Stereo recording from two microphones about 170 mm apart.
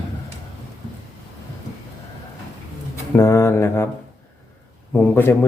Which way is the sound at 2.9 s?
15° left (ahead or behind).